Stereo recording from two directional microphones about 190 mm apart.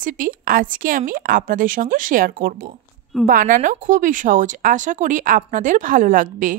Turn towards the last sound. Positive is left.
turn(degrees=-45)  # may be behind; listen again after turning